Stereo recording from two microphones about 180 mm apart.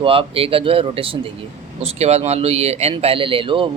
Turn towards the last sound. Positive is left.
turn(degrees=-30)  # may be behind; listen again after turning